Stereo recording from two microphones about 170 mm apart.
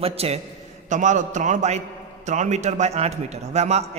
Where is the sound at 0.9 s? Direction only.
45° right (ahead or behind).